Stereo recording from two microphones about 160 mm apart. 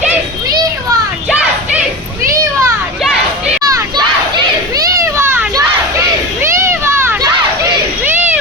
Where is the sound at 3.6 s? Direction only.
25° right (ahead or behind).